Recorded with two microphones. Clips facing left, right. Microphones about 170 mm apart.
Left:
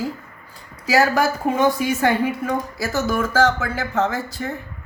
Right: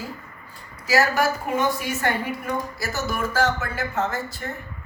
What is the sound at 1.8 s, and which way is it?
Speech, 90° left.